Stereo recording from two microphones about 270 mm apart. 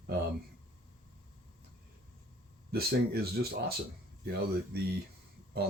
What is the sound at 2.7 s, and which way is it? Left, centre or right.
Speech, right.